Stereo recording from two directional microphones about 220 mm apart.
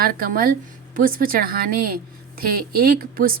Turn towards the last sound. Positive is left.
turn(degrees=-40)  # may be behind; listen again after turning